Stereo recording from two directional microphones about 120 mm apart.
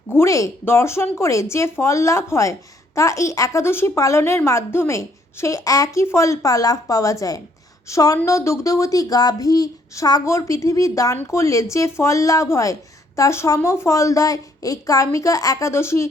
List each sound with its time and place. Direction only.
0.1 s speech: 25° left (ahead or behind)